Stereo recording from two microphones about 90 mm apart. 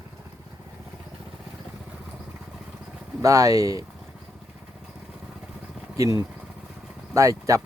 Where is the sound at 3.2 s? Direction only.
35° right (ahead or behind).